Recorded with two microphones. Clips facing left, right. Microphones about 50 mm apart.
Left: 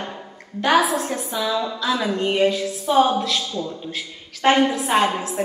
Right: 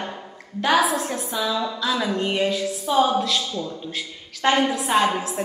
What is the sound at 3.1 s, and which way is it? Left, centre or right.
A man's voice, centre.